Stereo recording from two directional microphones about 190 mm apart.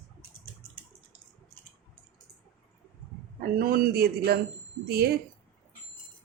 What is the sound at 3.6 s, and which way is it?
A woman's voice, 50° right (ahead or behind).